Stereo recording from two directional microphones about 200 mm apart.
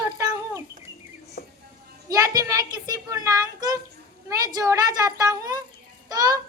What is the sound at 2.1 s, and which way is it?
A woman's voice, 15° right (ahead or behind).